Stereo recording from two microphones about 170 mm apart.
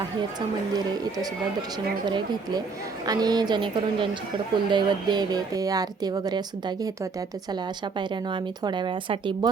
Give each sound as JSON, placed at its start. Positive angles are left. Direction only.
{"t": 2.0, "sound": "speech", "side_deg": -25}